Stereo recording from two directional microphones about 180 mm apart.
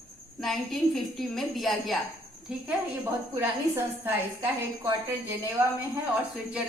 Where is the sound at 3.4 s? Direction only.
10° right (ahead or behind).